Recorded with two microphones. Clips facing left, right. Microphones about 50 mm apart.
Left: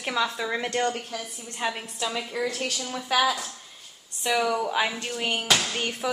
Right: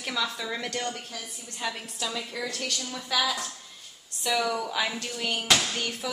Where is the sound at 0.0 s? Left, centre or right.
Left.